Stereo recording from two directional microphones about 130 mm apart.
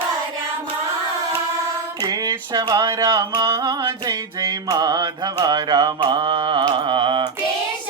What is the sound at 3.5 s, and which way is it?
Mantra, 25° right (ahead or behind).